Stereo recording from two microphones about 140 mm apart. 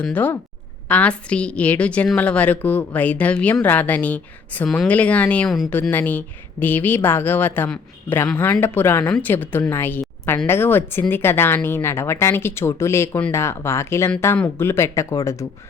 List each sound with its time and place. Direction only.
0.0 s a woman's voice: 10° left (ahead or behind)